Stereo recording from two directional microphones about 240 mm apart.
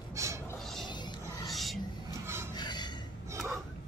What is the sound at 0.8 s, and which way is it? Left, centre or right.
Music, centre.